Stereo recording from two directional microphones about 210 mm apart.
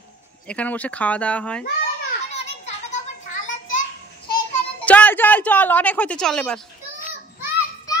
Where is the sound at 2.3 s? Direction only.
30° left (ahead or behind).